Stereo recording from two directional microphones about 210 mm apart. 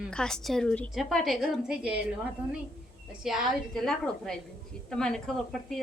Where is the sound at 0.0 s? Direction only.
5° left (ahead or behind).